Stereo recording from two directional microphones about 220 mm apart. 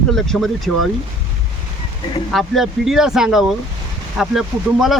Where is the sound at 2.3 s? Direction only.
Centre (ahead or behind).